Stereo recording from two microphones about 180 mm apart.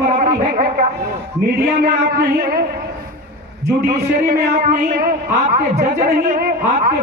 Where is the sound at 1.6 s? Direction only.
55° right (ahead or behind).